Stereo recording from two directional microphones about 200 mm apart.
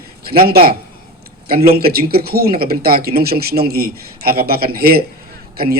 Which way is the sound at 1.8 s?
50° right (ahead or behind).